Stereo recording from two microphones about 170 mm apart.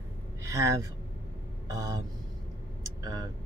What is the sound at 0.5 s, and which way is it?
Speech, 20° right (ahead or behind).